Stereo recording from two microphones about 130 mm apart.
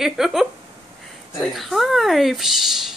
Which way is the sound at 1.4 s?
Centre (ahead or behind).